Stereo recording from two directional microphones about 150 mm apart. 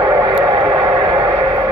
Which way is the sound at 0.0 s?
25° right (ahead or behind).